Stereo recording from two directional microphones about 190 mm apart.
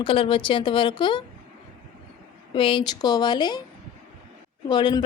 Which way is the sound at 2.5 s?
25° left (ahead or behind).